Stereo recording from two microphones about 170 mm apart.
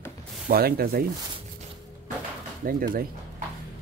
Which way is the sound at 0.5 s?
65° right (ahead or behind).